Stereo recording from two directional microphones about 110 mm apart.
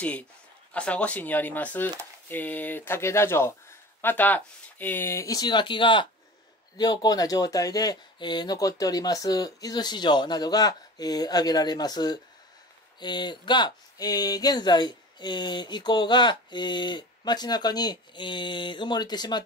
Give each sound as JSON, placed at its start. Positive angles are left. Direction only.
{"t": 0.7, "sound": "speech", "side_deg": 10}
{"t": 6.8, "sound": "speech", "side_deg": 35}